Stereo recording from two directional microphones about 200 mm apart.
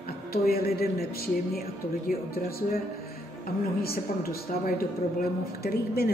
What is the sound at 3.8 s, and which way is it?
A woman's voice, 50° left (ahead or behind).